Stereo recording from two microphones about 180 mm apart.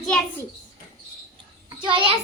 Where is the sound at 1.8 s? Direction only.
30° right (ahead or behind).